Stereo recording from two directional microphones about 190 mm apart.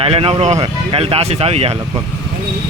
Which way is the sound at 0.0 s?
30° right (ahead or behind).